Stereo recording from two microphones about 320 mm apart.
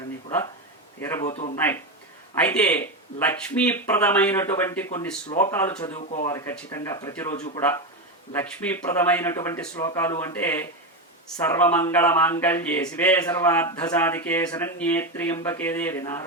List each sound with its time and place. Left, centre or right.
1.0 s speech: centre
1.3 s speech: centre
2.4 s speech: centre
7.3 s speech: left
8.3 s speech: centre